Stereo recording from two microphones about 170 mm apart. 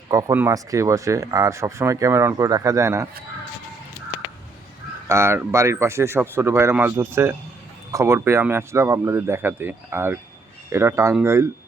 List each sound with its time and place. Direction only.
0.1 s speech: 20° right (ahead or behind)
5.0 s speech: 15° right (ahead or behind)